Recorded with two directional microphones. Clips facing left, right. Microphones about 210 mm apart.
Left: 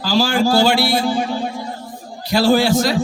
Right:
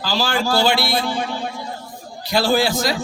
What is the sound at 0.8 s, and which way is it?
Speech, 30° left (ahead or behind).